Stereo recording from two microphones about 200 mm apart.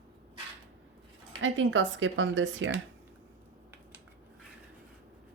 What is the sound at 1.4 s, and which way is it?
Speech, 70° right (ahead or behind).